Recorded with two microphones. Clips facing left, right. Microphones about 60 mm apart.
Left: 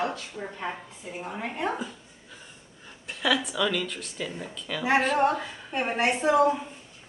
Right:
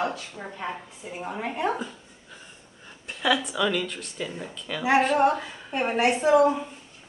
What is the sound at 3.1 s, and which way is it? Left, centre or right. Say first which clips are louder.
Speech: right 1 dB; centre.